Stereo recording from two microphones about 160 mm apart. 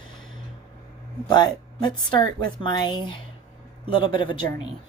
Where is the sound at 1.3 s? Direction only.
25° left (ahead or behind).